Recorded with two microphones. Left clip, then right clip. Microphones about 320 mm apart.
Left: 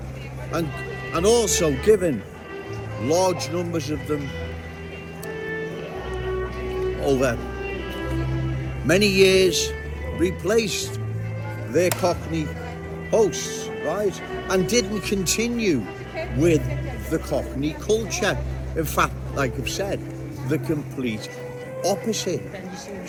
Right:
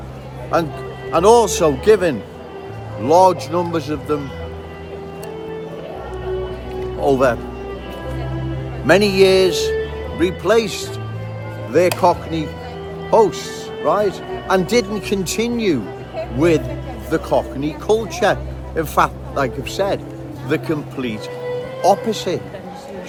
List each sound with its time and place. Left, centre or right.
1.1 s speech: centre
7.0 s speech: centre
8.9 s speech: centre